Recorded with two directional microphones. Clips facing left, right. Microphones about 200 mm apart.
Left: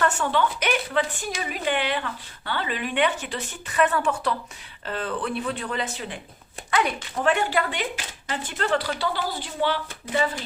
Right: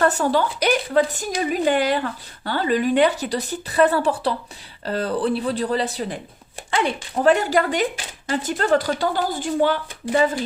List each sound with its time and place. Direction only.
0.0 s a woman's voice: 35° right (ahead or behind)